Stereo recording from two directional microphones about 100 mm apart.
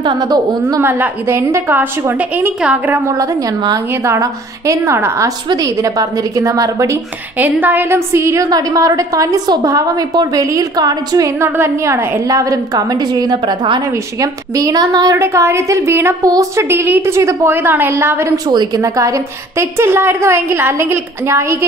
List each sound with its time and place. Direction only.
0.0 s a woman's voice: 45° right (ahead or behind)
0.7 s a woman's voice: 20° right (ahead or behind)
3.1 s a woman's voice: 35° right (ahead or behind)
7.3 s a woman's voice: 20° right (ahead or behind)
18.5 s a woman's voice: 45° right (ahead or behind)
18.8 s a woman's voice: 35° right (ahead or behind)